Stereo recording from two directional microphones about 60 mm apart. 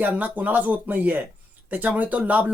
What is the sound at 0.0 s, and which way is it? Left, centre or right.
Speech, right.